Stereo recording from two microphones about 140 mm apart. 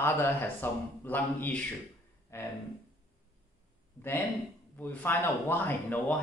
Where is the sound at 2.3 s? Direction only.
20° left (ahead or behind).